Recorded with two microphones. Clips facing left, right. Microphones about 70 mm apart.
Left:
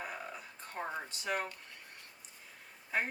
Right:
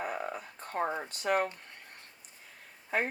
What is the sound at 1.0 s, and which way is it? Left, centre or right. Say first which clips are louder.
Speech: right 7 dB; right.